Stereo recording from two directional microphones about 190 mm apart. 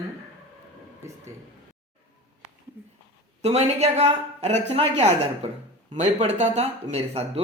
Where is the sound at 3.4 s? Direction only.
35° right (ahead or behind).